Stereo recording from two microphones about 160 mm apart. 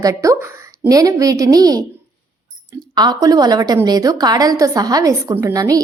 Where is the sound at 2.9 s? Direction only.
25° right (ahead or behind).